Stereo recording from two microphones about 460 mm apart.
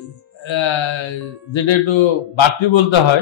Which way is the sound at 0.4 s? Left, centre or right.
Left.